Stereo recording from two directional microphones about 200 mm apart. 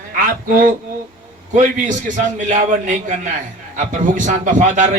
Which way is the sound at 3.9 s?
40° right (ahead or behind).